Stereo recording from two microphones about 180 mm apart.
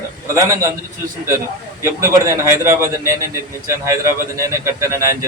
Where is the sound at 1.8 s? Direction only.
15° right (ahead or behind).